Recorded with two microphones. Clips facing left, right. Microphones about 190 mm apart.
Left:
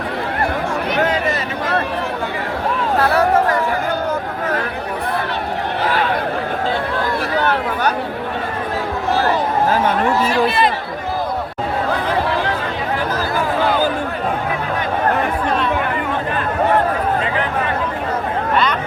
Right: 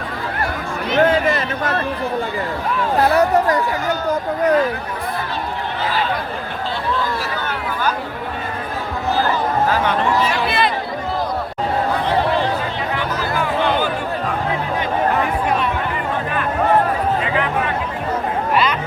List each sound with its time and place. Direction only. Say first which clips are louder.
7.3 s chatter: left 6 dB; 70° left (ahead or behind)
9.8 s speech: left 1 dB; 45° left (ahead or behind)
18.5 s chatter: even; 5° right (ahead or behind)